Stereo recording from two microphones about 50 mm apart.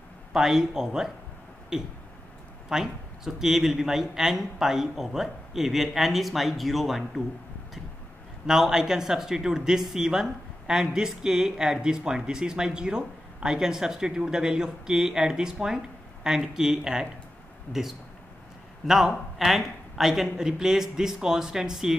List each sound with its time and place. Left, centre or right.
0.3 s speech: centre
2.7 s a man's voice: centre
8.5 s speech: centre
17.7 s speech: left
18.9 s speech: centre